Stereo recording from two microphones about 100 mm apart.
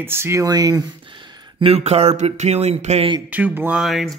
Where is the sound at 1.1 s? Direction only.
55° right (ahead or behind).